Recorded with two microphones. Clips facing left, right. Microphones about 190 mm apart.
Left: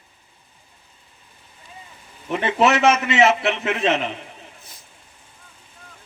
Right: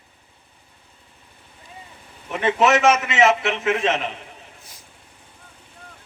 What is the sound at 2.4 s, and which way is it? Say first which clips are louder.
A man's voice: even; 30° left (ahead or behind).